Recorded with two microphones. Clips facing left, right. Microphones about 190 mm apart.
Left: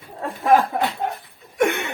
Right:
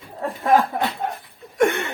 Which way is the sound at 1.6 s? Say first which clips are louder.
Right 1 dB; centre (ahead or behind).